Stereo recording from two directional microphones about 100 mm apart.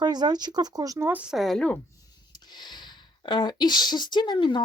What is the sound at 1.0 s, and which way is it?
Speech, 15° right (ahead or behind).